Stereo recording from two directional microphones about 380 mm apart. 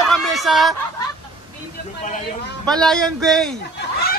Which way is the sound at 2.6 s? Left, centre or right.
Centre.